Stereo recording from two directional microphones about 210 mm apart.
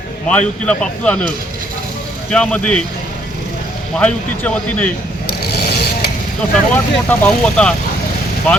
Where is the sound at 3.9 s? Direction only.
5° left (ahead or behind).